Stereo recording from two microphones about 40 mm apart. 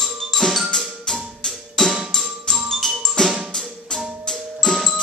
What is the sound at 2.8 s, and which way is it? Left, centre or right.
Percussion, centre.